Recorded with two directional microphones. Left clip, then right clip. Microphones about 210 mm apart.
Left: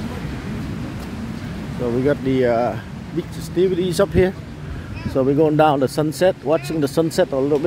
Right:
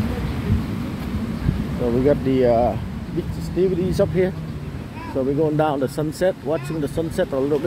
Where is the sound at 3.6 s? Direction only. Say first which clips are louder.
Left 2 dB; 20° left (ahead or behind).